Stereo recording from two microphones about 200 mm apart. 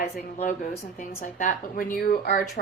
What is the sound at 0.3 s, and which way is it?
A woman's voice, 40° left (ahead or behind).